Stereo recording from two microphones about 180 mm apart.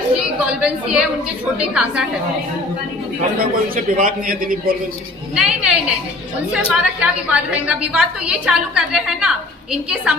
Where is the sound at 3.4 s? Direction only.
50° right (ahead or behind).